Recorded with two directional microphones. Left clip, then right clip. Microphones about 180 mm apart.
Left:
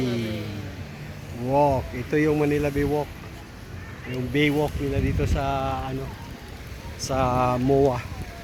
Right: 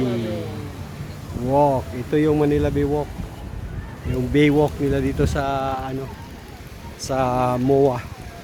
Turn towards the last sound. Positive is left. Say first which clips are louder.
# right 3 dB
turn(degrees=-10)  # may be behind; listen again after turning